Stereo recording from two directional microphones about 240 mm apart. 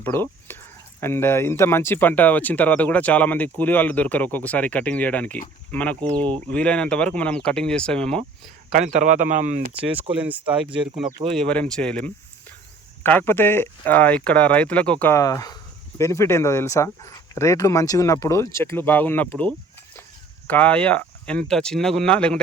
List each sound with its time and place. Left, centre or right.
0.0 s speech: centre
8.7 s speech: right
9.8 s speech: centre
10.4 s speech: right
11.3 s speech: centre